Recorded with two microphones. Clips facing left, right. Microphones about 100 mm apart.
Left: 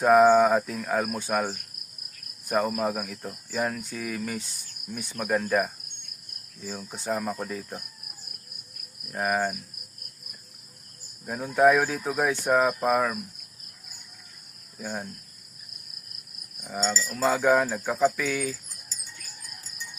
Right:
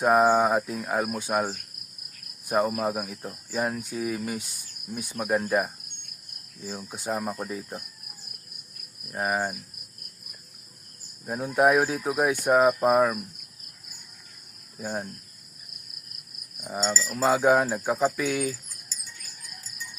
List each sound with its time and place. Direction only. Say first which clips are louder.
0.0 s speech: left 3 dB; 5° right (ahead or behind)
6.8 s speech: left 1 dB; 10° right (ahead or behind)
9.2 s speech: left 1 dB; 15° right (ahead or behind)
11.3 s speech: left 1 dB; 15° right (ahead or behind)
14.8 s speech: right 2 dB; 25° right (ahead or behind)
16.8 s speech: right 1 dB; 10° right (ahead or behind)